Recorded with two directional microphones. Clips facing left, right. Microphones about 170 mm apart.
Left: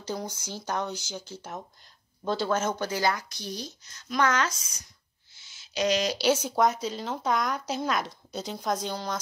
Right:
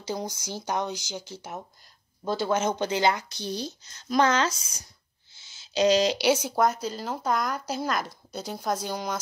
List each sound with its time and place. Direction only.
0.0 s speech: 15° right (ahead or behind)
5.3 s a sound: 25° right (ahead or behind)
6.1 s speech: 15° right (ahead or behind)